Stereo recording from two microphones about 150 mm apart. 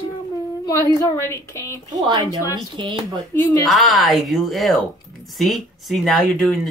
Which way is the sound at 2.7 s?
30° right (ahead or behind).